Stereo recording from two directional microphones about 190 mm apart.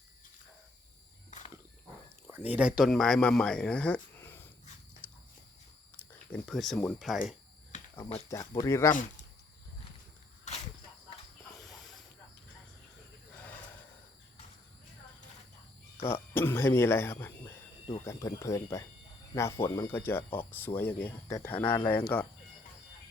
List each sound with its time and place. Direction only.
1.3 s wild animals: 40° left (ahead or behind)
2.3 s speech: 10° right (ahead or behind); by 4.4 s 10° left (ahead or behind)
6.3 s speech: centre (ahead or behind)
8.3 s speech: 15° left (ahead or behind)
11.5 s snake: centre (ahead or behind)
16.0 s speech: 10° left (ahead or behind)